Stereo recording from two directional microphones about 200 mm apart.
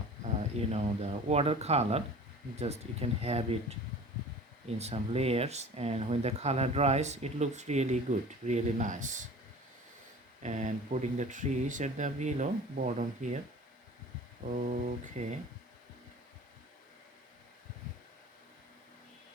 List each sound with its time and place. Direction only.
0.5 s speech: 30° right (ahead or behind)
4.8 s speech: 30° right (ahead or behind)
10.4 s speech: 35° right (ahead or behind)
14.4 s speech: 40° right (ahead or behind)